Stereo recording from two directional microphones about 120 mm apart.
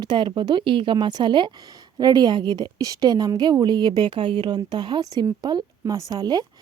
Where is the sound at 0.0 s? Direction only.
40° right (ahead or behind).